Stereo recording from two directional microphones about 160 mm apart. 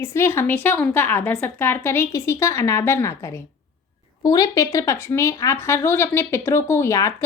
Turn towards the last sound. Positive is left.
turn(degrees=20)  # may be behind; listen again after turning